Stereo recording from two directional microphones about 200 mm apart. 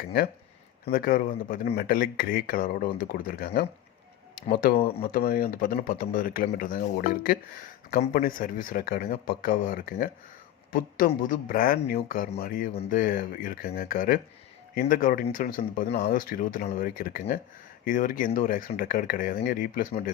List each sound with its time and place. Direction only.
0.9 s speech: 45° left (ahead or behind)